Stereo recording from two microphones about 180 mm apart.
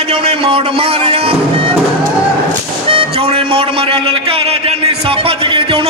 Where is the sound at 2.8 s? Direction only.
30° right (ahead or behind).